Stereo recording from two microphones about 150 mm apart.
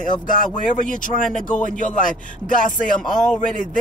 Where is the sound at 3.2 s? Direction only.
60° left (ahead or behind).